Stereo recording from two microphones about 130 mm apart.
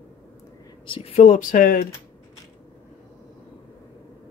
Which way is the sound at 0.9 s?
45° left (ahead or behind).